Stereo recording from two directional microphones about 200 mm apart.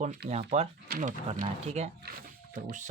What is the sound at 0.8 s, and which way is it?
Speech, 50° right (ahead or behind).